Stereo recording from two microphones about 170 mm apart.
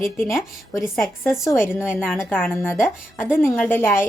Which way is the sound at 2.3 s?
10° left (ahead or behind).